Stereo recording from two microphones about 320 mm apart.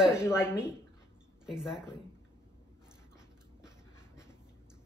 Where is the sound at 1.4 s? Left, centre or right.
Centre.